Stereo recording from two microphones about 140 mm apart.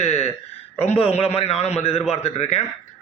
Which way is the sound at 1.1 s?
45° left (ahead or behind).